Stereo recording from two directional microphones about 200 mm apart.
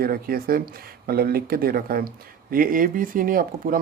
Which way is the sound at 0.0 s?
45° right (ahead or behind).